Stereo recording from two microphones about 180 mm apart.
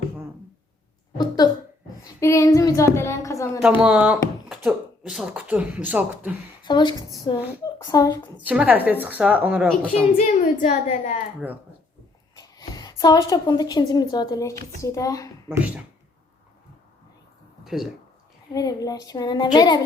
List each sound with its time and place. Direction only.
2.2 s child singing: 15° left (ahead or behind)
3.6 s speech: 5° right (ahead or behind)
6.7 s a child's voice: 25° left (ahead or behind)
8.4 s a woman's voice: 10° right (ahead or behind)
10.2 s a woman's voice: 45° left (ahead or behind)
12.4 s a woman's voice: 20° left (ahead or behind)
15.4 s speech: 10° right (ahead or behind)
17.6 s a sound: centre (ahead or behind)
18.5 s a child's voice: 20° left (ahead or behind)